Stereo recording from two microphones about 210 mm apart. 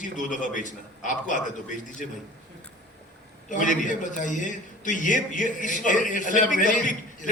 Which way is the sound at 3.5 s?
35° left (ahead or behind).